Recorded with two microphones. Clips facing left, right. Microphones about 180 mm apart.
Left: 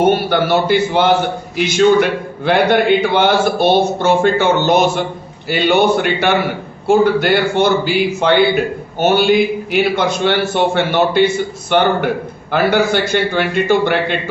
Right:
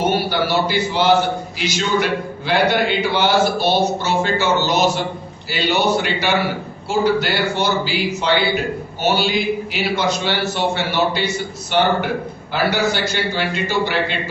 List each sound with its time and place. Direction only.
0.0 s a man's voice: 55° left (ahead or behind)